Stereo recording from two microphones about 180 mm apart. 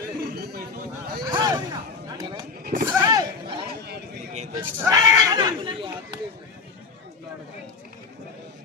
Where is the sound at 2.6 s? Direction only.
55° right (ahead or behind).